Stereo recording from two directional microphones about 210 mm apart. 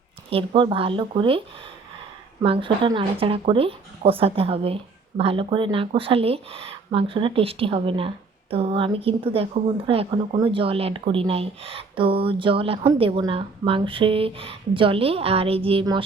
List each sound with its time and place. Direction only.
0.3 s speech: 25° right (ahead or behind)